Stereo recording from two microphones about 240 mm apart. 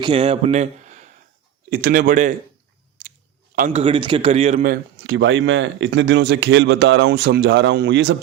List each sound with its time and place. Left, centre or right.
0.0 s a man's voice: right
3.5 s speech: right